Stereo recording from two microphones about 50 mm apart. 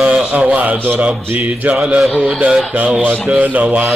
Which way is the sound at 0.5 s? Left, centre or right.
Right.